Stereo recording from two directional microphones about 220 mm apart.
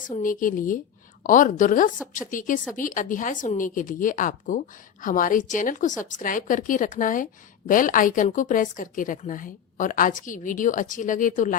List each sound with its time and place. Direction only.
0.2 s a woman's voice: 40° left (ahead or behind)